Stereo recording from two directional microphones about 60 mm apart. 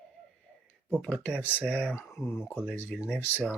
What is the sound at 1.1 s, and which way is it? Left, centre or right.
Speech, left.